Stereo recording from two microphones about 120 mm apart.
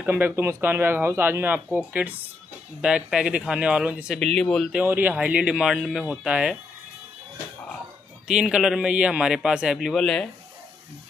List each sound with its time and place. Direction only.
0.0 s speech: 15° right (ahead or behind)
4.2 s speech: 5° left (ahead or behind)
4.7 s speech: 15° right (ahead or behind)
8.3 s a man's voice: 5° right (ahead or behind)